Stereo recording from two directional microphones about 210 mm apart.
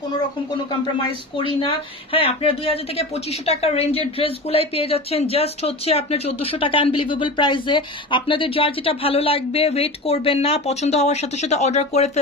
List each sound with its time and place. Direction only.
2.1 s a woman's voice: 25° left (ahead or behind)